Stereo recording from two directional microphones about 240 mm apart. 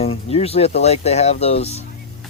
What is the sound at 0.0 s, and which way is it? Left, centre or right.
Speech, left.